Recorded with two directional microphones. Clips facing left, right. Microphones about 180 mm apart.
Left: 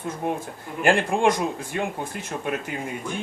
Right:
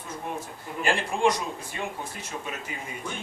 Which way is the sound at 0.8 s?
55° left (ahead or behind).